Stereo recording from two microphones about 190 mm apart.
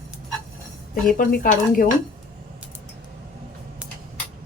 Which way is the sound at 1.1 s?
45° left (ahead or behind).